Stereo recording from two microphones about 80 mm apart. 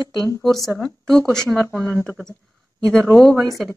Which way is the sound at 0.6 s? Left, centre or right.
Left.